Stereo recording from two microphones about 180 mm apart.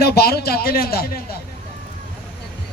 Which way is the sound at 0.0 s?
60° left (ahead or behind).